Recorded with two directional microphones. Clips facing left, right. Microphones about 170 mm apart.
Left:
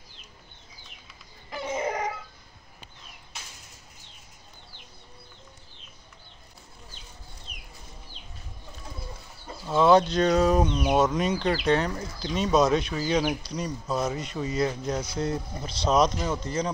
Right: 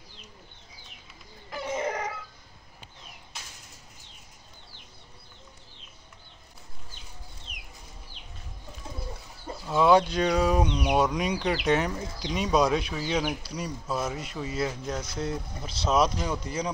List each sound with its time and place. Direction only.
1.5 s baby cry: 5° left (ahead or behind)
9.7 s speech: 10° right (ahead or behind)